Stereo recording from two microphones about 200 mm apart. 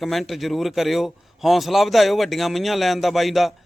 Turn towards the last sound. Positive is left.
turn(degrees=0)  # may be behind; listen again after turning